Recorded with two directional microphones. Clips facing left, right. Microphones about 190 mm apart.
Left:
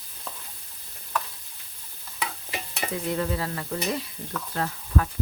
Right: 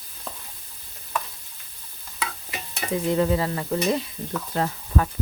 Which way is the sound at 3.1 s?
20° right (ahead or behind).